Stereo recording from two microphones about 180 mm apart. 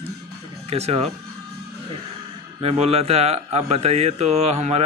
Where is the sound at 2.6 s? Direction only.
35° right (ahead or behind).